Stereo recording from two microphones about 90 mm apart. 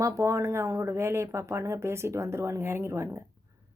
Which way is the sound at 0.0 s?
35° right (ahead or behind).